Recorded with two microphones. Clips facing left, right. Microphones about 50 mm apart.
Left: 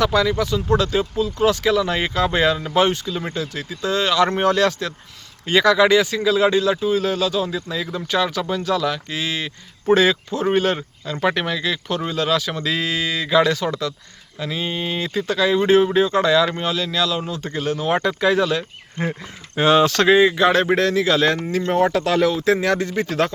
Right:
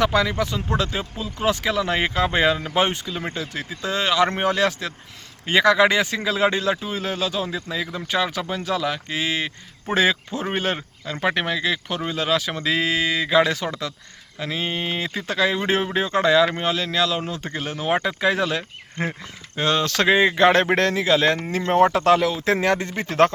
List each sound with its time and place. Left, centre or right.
0.0 s speech: right
18.2 s speech: right
19.5 s speech: centre
20.0 s speech: centre
20.2 s speech: right
20.9 s speech: right
22.4 s speech: right